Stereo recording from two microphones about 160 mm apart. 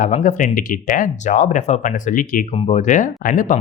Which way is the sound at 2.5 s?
45° left (ahead or behind).